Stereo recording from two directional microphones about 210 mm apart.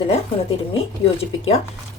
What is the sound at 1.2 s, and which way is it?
Speech, 30° left (ahead or behind).